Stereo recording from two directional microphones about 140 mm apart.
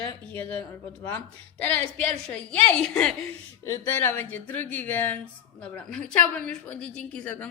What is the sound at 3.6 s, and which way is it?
Speech, 15° left (ahead or behind).